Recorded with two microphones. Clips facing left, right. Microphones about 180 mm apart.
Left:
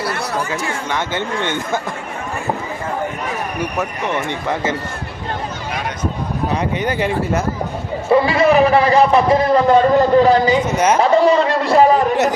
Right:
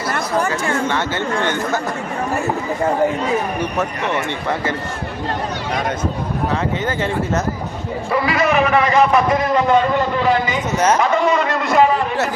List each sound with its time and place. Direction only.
0.7 s speech: 15° left (ahead or behind)
3.6 s speech: 15° left (ahead or behind)
6.5 s speech: 15° left (ahead or behind)
8.1 s a man's voice: 30° left (ahead or behind)